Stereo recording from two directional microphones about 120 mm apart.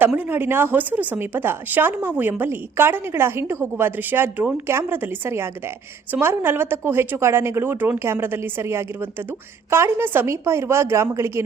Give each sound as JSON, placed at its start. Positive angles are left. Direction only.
{"t": 0.3, "sound": "a woman's voice", "side_deg": -15}